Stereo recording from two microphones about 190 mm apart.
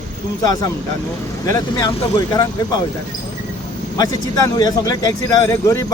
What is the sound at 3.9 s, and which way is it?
A man's voice, 20° left (ahead or behind).